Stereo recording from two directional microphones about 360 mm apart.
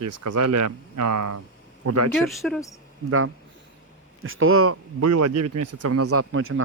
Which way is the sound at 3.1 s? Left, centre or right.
Right.